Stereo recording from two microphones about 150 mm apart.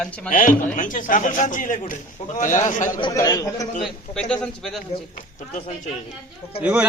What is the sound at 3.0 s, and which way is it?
Speech, 25° left (ahead or behind).